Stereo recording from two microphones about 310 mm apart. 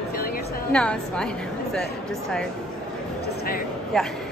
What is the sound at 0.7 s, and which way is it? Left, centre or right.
A woman's voice, centre.